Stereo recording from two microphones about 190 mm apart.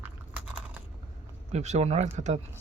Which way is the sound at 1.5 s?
35° right (ahead or behind).